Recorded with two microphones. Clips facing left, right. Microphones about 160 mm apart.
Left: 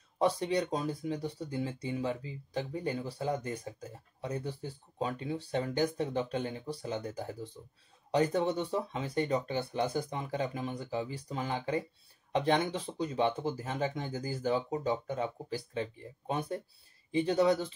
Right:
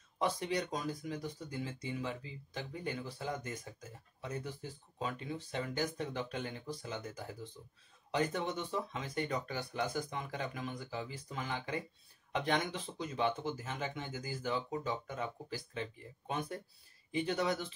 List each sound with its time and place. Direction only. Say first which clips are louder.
0.2 s speech: left 6 dB; 30° left (ahead or behind)